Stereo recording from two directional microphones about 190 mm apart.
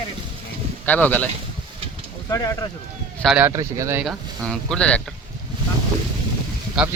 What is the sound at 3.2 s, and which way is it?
Speech, centre (ahead or behind).